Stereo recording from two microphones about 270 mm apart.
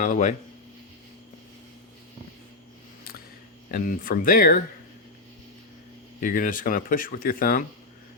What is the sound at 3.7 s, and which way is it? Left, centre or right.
Speech, left.